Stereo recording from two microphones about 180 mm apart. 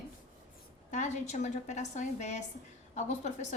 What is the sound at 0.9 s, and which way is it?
A woman's voice, 40° left (ahead or behind).